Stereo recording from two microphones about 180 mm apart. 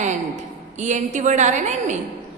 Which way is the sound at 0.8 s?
40° right (ahead or behind).